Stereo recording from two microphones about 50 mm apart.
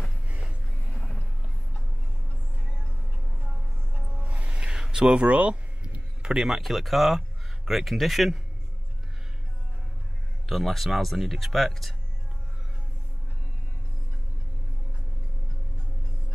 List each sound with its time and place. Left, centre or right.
0.3 s a sound: right
0.9 s music: left
4.2 s music: right
4.9 s a sound: centre
6.6 s speech: centre
10.5 s speech: centre